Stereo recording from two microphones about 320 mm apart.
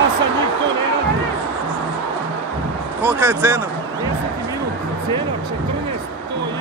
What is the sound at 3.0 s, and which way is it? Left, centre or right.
Speech, centre.